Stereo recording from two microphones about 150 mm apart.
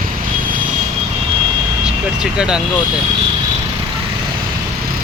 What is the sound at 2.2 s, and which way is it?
Speech, 5° right (ahead or behind).